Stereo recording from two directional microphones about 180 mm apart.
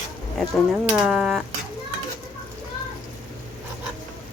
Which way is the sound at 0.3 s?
5° right (ahead or behind).